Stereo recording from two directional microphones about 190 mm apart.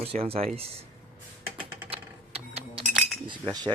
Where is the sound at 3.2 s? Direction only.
20° right (ahead or behind).